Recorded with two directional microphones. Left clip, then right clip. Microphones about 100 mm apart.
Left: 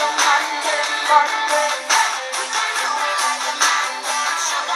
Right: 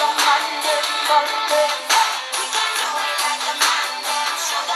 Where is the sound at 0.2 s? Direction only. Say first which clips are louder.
Left 1 dB; 35° right (ahead or behind).